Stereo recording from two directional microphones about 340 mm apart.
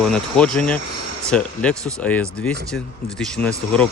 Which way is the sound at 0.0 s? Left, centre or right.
Centre.